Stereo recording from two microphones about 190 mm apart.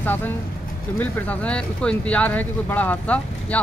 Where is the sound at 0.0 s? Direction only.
10° left (ahead or behind).